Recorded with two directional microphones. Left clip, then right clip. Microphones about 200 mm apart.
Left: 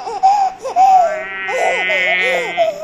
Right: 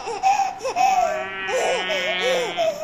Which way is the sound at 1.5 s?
15° left (ahead or behind).